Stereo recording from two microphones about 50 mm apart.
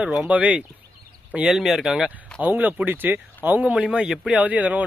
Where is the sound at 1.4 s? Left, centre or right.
Centre.